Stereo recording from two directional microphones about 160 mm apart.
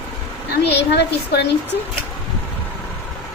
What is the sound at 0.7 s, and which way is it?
Speech, 90° left.